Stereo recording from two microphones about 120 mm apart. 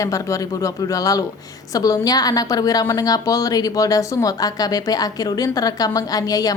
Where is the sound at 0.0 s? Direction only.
25° left (ahead or behind).